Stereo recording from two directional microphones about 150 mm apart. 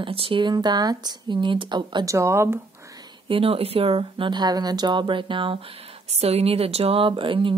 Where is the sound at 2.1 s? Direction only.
20° right (ahead or behind).